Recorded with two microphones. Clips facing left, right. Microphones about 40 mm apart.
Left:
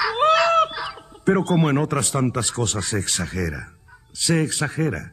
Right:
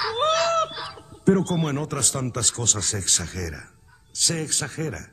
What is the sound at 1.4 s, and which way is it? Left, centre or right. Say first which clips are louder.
A man's voice: left 6 dB; left.